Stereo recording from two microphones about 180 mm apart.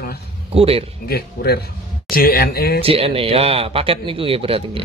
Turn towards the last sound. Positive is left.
turn(degrees=-30)  # may be behind; listen again after turning